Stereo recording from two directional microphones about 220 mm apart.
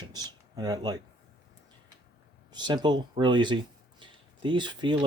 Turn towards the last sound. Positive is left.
turn(degrees=-20)  # may be behind; listen again after turning